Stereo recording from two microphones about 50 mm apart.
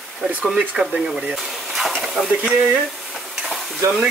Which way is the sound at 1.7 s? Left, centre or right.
Centre.